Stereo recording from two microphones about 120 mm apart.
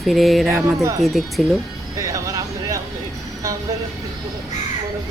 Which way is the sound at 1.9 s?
30° right (ahead or behind).